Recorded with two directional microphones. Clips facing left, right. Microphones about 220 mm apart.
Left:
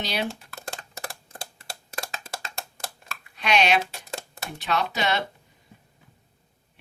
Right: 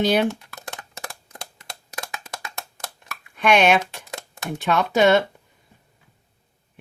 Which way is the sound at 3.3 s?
50° right (ahead or behind).